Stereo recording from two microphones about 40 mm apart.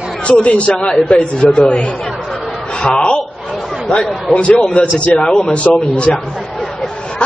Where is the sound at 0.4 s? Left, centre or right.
Left.